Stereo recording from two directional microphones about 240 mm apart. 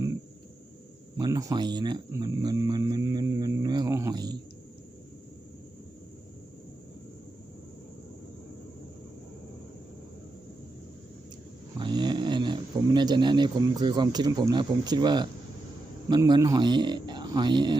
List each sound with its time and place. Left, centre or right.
1.1 s speech: centre
11.8 s a man's voice: centre